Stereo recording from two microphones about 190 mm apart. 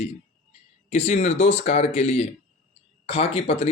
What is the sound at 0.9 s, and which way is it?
Speech, 35° left (ahead or behind).